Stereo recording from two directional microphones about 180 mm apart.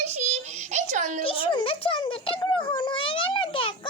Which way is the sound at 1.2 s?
30° left (ahead or behind).